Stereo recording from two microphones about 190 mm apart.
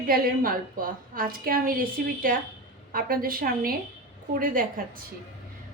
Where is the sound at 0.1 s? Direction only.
50° right (ahead or behind).